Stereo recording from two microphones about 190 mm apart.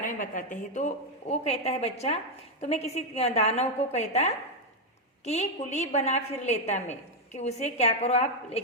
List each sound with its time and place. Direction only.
0.0 s a woman's voice: 45° left (ahead or behind)